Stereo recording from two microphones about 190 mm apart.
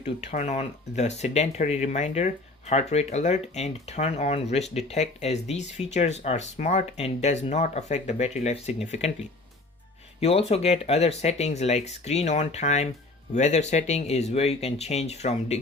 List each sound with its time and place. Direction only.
0.0 s speech: 35° left (ahead or behind)
10.2 s speech: 30° left (ahead or behind)